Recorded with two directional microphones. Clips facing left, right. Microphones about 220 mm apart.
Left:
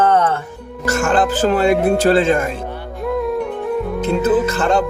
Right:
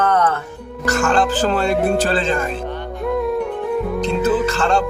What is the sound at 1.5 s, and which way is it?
Speech, 5° left (ahead or behind).